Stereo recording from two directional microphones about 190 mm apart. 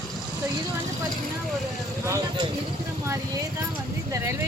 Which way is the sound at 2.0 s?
15° right (ahead or behind).